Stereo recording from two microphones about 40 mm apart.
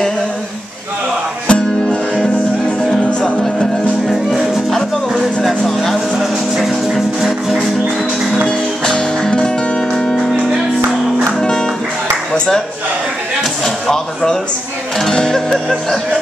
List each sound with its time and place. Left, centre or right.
1.5 s music: left
3.1 s music: left
4.1 s music: centre
6.1 s music: centre
8.5 s music: centre
9.9 s music: centre
11.3 s music: centre
13.4 s speech: centre
15.1 s music: centre
15.5 s music: centre